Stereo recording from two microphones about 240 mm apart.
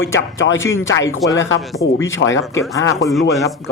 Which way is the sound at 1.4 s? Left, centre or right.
Left.